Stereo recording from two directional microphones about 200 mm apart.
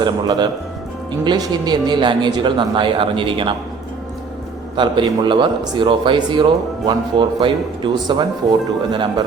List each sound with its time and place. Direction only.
0.0 s speech: 20° right (ahead or behind)
4.8 s speech: 25° right (ahead or behind)